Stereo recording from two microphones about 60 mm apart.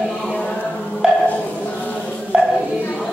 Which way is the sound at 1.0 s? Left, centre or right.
Centre.